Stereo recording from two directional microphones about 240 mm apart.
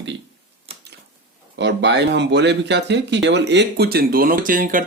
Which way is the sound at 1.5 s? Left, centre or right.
Right.